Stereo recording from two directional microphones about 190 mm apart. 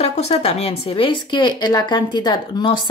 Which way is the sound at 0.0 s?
35° left (ahead or behind).